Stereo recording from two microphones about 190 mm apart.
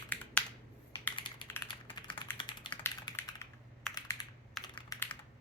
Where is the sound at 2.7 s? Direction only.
10° left (ahead or behind).